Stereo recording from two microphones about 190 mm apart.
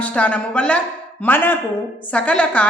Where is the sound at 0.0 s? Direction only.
5° left (ahead or behind).